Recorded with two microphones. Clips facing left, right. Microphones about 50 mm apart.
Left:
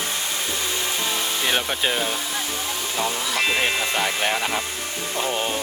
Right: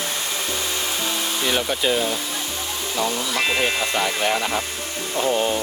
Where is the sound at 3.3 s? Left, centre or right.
Centre.